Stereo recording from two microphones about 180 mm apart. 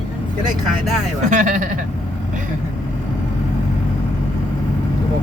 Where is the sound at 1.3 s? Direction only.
45° right (ahead or behind).